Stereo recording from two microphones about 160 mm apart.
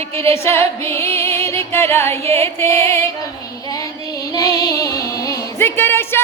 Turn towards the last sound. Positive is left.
turn(degrees=15)  # may be behind; listen again after turning